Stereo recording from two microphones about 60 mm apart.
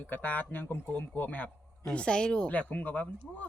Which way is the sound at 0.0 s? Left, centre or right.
Left.